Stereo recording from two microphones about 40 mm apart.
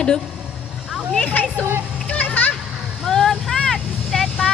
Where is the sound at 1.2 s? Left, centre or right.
Left.